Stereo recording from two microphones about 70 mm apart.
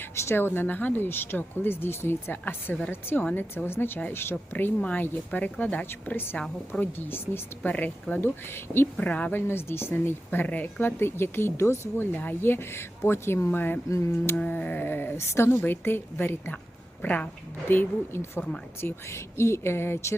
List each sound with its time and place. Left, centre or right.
0.2 s speech: left
4.8 s speech: centre
8.2 s speech: left
9.0 s speech: left
9.3 s speech: left
13.9 s a sound: left
14.3 s speech: left
17.0 s speech: centre
17.7 s speech: left